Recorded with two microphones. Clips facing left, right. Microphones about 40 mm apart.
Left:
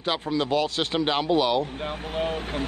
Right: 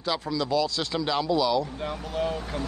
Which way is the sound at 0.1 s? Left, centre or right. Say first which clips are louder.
Left 2 dB; left.